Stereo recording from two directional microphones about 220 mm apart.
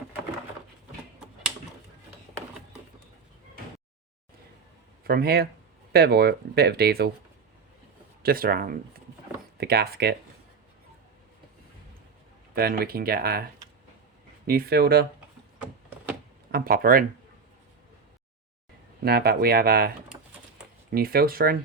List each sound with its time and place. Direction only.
5.0 s speech: 45° right (ahead or behind)
8.2 s speech: 40° right (ahead or behind)
12.5 s speech: 45° right (ahead or behind)
14.4 s speech: 45° right (ahead or behind)
16.5 s speech: 40° right (ahead or behind)
19.0 s speech: 45° right (ahead or behind)
20.9 s speech: 45° right (ahead or behind)